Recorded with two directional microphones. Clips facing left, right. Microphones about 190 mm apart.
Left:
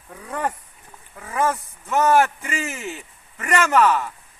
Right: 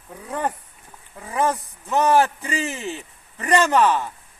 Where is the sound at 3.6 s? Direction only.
20° right (ahead or behind).